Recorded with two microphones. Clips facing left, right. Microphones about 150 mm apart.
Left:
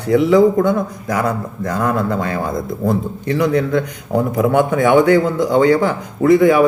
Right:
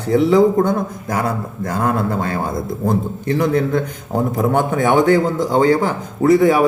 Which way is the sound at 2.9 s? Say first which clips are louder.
Even; 45° right (ahead or behind).